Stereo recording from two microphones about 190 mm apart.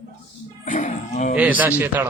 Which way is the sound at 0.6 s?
40° left (ahead or behind).